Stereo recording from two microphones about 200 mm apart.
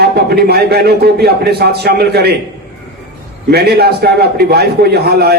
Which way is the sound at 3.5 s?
55° right (ahead or behind).